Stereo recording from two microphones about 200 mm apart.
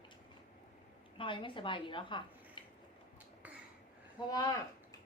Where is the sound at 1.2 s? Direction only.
25° left (ahead or behind).